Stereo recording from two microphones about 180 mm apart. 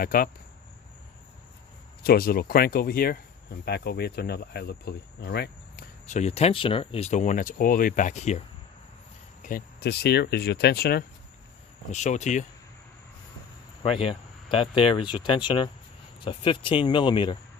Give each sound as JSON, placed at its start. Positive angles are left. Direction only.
{"t": 0.0, "sound": "speech", "side_deg": 50}
{"t": 2.0, "sound": "speech", "side_deg": 55}
{"t": 6.1, "sound": "speech", "side_deg": 40}
{"t": 9.4, "sound": "speech", "side_deg": 50}
{"t": 11.9, "sound": "speech", "side_deg": 40}
{"t": 13.8, "sound": "speech", "side_deg": 30}